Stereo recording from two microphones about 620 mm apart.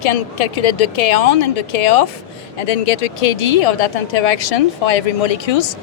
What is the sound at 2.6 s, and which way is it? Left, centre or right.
Speech, left.